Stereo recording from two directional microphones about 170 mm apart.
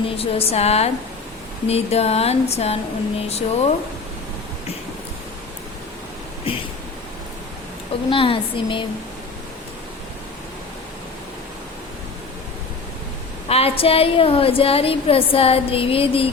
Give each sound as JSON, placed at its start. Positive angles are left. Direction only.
{"t": 0.2, "sound": "a woman's voice", "side_deg": 35}
{"t": 8.1, "sound": "a woman's voice", "side_deg": 30}
{"t": 13.5, "sound": "a woman's voice", "side_deg": 35}